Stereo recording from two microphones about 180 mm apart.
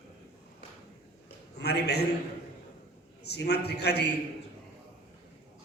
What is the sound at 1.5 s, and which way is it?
Speech, 65° left (ahead or behind).